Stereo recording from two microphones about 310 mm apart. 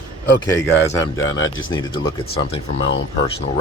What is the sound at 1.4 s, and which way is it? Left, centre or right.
Speech, left.